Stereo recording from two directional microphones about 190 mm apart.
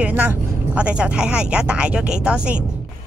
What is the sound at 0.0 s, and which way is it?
Speech, 10° right (ahead or behind).